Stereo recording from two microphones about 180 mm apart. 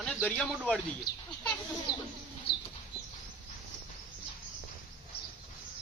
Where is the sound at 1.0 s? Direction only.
25° left (ahead or behind).